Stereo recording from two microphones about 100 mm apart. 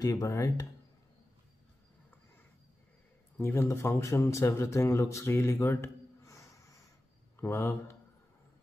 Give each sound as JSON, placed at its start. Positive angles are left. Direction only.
{"t": 0.0, "sound": "speech", "side_deg": 35}
{"t": 3.3, "sound": "speech", "side_deg": 25}